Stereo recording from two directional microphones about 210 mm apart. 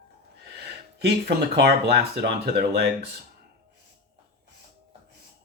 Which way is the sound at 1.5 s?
50° right (ahead or behind).